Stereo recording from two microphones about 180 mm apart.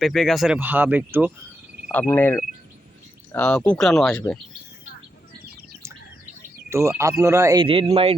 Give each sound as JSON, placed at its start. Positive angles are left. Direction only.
{"t": 0.0, "sound": "speech", "side_deg": 0}
{"t": 1.9, "sound": "speech", "side_deg": 10}
{"t": 6.7, "sound": "speech", "side_deg": -15}
{"t": 7.6, "sound": "speech", "side_deg": -30}